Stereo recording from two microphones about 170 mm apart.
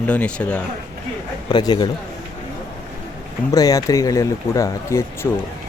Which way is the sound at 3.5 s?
20° left (ahead or behind).